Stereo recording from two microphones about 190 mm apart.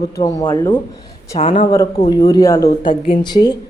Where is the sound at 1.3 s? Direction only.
35° left (ahead or behind).